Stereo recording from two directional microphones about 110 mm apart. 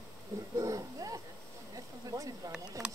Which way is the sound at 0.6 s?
30° right (ahead or behind).